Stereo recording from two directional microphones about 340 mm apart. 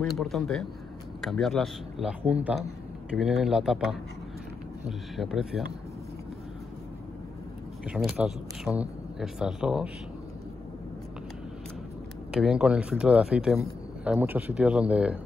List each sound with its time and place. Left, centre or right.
0.1 s a man's voice: centre
7.9 s a man's voice: centre
12.3 s a man's voice: centre